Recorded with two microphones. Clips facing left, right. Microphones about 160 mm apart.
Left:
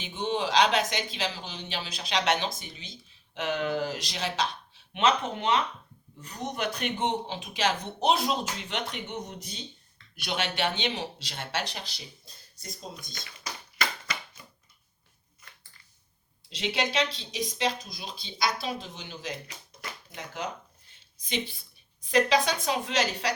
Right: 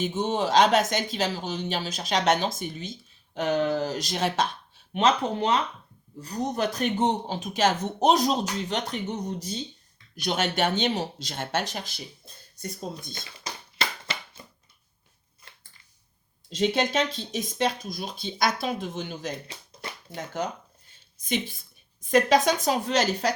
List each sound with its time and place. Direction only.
0.0 s speech: 45° right (ahead or behind)
4.9 s speech: 40° right (ahead or behind)
13.1 s a sound: 25° right (ahead or behind)
16.5 s speech: 45° right (ahead or behind)
19.5 s a sound: 30° right (ahead or behind)
21.2 s a woman's voice: 50° right (ahead or behind)